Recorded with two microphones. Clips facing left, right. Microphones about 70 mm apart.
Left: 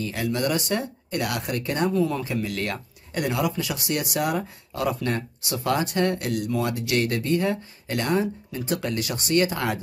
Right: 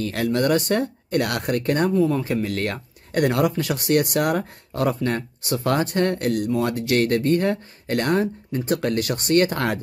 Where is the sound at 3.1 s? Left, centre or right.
Right.